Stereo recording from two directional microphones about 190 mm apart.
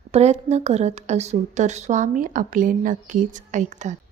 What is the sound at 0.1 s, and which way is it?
A woman's voice, 35° right (ahead or behind).